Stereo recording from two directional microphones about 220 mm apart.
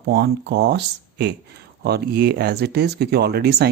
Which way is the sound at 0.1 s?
50° right (ahead or behind).